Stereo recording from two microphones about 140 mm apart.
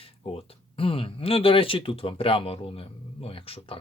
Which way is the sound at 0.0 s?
40° left (ahead or behind).